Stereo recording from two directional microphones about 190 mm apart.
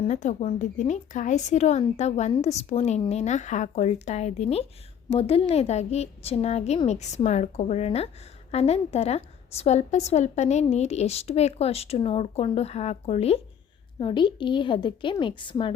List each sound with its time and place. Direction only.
0.0 s a woman's voice: 40° left (ahead or behind)